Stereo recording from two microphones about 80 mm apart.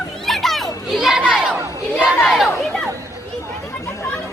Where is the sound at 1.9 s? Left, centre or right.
Centre.